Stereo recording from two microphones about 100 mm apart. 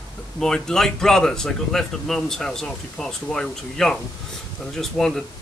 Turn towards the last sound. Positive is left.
turn(degrees=5)  # may be behind; listen again after turning